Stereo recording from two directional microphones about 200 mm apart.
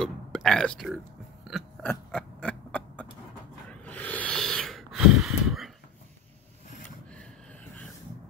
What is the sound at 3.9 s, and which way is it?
Snort, 5° left (ahead or behind).